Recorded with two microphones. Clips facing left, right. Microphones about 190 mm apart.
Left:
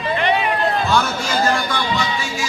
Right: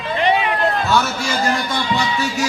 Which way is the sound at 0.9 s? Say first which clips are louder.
Even; 5° right (ahead or behind).